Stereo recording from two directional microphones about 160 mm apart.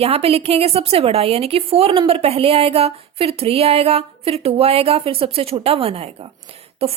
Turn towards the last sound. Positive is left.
turn(degrees=-35)  # may be behind; listen again after turning